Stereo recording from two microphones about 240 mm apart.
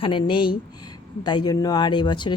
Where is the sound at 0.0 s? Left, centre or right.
Left.